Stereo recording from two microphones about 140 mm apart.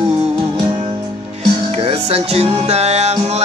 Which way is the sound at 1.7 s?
45° right (ahead or behind).